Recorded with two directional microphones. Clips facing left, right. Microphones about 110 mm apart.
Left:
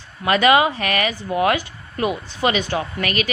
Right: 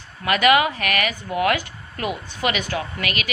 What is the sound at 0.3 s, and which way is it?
A woman's voice, 25° left (ahead or behind).